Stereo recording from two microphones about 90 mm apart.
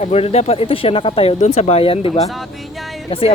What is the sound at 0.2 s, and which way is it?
Speech, 90° left.